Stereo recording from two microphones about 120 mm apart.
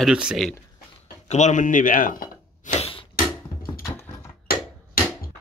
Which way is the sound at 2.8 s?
50° left (ahead or behind).